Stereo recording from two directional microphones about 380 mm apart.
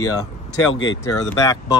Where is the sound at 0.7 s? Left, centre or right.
Left.